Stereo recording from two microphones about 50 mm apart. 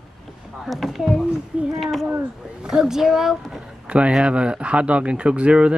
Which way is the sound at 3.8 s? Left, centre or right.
Right.